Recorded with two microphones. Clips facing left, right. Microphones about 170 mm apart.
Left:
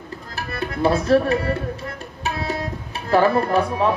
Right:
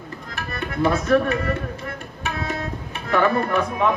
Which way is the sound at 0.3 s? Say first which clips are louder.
Even; 30° left (ahead or behind).